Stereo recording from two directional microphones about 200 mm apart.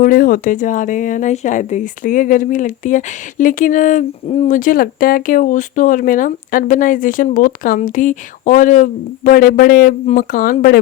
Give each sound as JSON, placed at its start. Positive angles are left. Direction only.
{"t": 0.0, "sound": "speech", "side_deg": 45}